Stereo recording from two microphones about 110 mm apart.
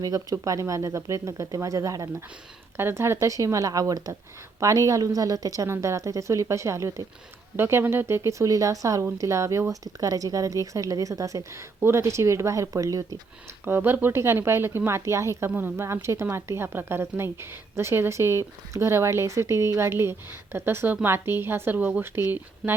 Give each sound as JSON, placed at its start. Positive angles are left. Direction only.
{"t": 0.0, "sound": "speech", "side_deg": -35}
{"t": 13.7, "sound": "speech", "side_deg": -20}